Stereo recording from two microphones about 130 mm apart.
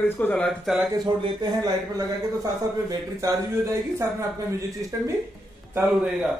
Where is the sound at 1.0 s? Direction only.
35° right (ahead or behind).